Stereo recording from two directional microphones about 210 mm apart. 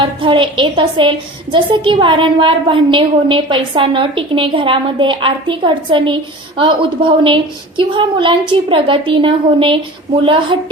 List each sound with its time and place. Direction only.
0.0 s a woman's voice: 25° right (ahead or behind)